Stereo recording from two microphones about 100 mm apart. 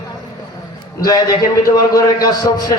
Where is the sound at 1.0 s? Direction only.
35° left (ahead or behind).